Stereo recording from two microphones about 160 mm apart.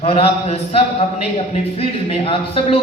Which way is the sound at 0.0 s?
40° left (ahead or behind).